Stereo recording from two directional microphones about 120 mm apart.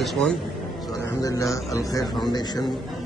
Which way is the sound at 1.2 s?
25° left (ahead or behind).